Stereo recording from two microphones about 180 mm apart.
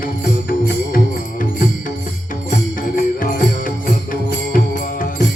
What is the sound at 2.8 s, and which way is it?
Music, 50° left (ahead or behind).